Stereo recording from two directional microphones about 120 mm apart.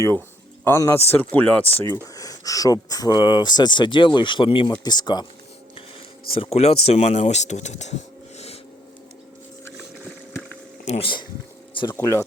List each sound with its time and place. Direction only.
0.6 s speech: 20° left (ahead or behind)
2.1 s speech: 30° left (ahead or behind)
6.3 s speech: 55° left (ahead or behind)
10.8 s speech: 50° left (ahead or behind)